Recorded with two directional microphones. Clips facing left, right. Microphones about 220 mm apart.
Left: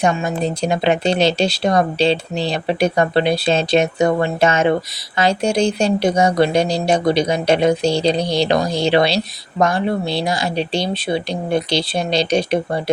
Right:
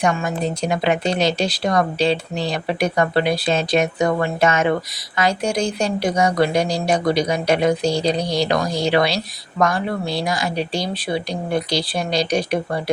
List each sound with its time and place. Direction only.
0.0 s speech: 20° left (ahead or behind)